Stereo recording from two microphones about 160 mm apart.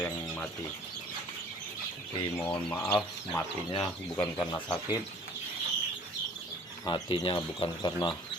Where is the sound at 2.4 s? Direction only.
10° left (ahead or behind).